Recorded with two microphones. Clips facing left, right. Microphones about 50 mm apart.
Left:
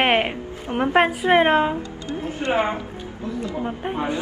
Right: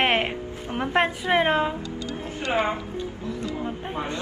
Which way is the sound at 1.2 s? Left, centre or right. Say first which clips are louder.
Left 5 dB; left.